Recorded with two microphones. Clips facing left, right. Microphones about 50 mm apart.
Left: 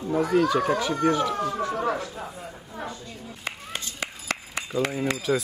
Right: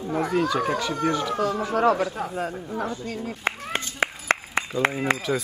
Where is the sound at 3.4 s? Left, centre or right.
Right.